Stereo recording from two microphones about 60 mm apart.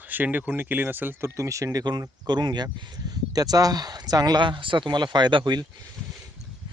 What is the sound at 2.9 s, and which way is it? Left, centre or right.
Speech, right.